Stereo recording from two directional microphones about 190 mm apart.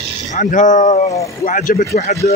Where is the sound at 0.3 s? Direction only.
40° left (ahead or behind).